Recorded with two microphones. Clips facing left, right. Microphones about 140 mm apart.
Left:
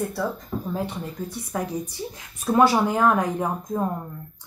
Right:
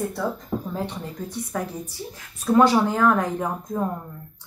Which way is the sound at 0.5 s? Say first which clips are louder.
Right 2 dB; 15° right (ahead or behind).